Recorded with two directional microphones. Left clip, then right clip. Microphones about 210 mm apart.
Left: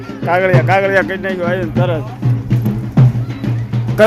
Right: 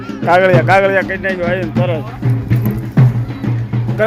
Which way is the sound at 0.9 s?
20° left (ahead or behind).